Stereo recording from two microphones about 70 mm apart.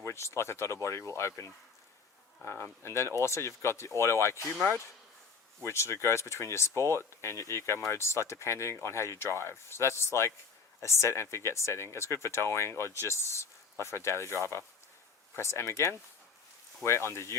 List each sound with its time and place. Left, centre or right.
0.0 s speech: left
5.6 s speech: left